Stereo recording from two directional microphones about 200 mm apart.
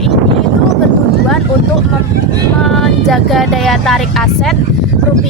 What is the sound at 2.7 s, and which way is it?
Speech, centre (ahead or behind).